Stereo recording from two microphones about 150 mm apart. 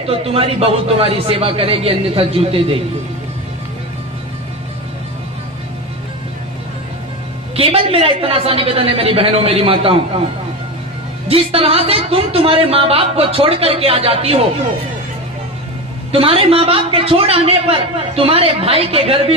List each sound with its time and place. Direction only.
0.1 s a woman's voice: 40° right (ahead or behind)
7.5 s a woman's voice: 40° right (ahead or behind)
11.3 s a woman's voice: 40° right (ahead or behind)
16.1 s a woman's voice: 40° right (ahead or behind)